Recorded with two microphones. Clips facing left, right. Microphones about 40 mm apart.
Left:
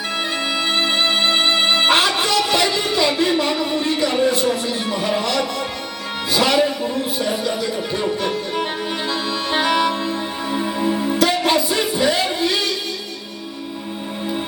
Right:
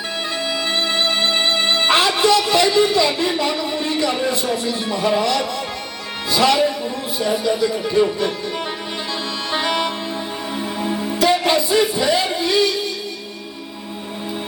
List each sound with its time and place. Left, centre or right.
0.9 s music: centre
2.0 s a sound: centre
3.3 s music: centre
6.3 s music: centre
7.2 s speech: centre
9.6 s music: centre